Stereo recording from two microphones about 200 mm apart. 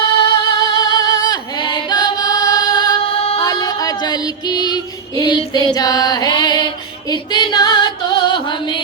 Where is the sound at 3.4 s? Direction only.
20° left (ahead or behind).